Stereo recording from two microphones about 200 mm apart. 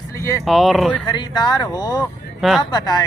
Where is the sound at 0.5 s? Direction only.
Centre (ahead or behind).